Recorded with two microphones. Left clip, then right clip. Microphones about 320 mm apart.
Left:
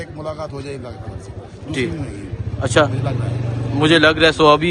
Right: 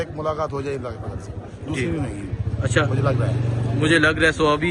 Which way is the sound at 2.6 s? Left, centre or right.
Centre.